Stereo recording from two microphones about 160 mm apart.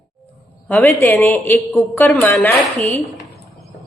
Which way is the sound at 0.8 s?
15° left (ahead or behind).